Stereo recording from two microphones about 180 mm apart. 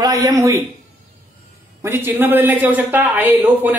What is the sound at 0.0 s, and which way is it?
Speech, 20° right (ahead or behind).